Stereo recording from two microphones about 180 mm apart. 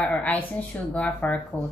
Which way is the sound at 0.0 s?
5° left (ahead or behind).